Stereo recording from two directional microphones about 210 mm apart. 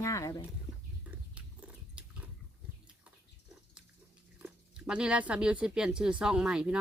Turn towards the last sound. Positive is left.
turn(degrees=-5)  # may be behind; listen again after turning